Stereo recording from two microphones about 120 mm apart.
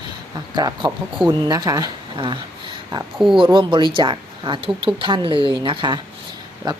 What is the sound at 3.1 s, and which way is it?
Speech, centre (ahead or behind).